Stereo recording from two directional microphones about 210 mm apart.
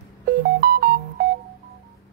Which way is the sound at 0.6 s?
45° right (ahead or behind).